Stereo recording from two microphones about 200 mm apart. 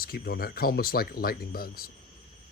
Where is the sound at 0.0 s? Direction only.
50° left (ahead or behind).